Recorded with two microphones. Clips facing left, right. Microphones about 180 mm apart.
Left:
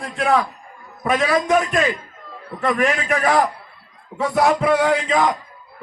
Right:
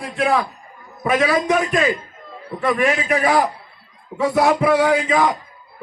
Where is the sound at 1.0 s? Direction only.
5° right (ahead or behind).